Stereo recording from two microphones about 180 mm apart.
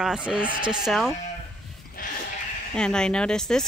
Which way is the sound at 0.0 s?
5° right (ahead or behind).